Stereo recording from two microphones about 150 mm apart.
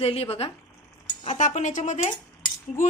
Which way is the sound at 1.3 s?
55° left (ahead or behind).